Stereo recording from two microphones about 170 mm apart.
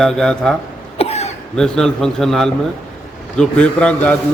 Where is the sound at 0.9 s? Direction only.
40° left (ahead or behind).